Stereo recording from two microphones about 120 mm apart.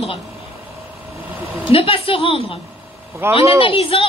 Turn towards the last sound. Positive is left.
turn(degrees=50)  # may be behind; listen again after turning